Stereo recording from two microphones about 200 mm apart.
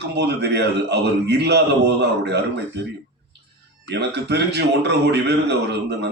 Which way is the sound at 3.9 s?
55° right (ahead or behind).